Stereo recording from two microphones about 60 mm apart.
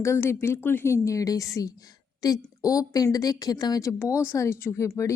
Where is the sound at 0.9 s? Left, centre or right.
Left.